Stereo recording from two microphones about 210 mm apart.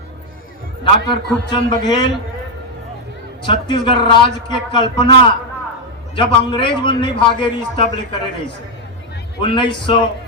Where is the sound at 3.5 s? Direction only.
25° left (ahead or behind).